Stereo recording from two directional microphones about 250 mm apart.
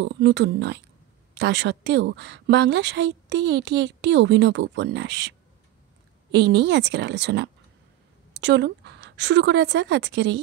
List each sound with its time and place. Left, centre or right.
0.0 s a woman's voice: right
6.3 s a woman's voice: right